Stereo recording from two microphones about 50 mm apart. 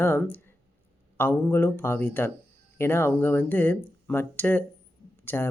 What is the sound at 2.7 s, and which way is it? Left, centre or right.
Speech, left.